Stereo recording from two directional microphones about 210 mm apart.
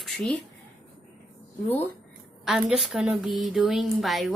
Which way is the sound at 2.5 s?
5° right (ahead or behind).